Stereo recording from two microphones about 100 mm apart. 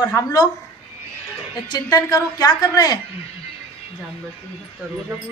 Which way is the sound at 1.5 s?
40° left (ahead or behind).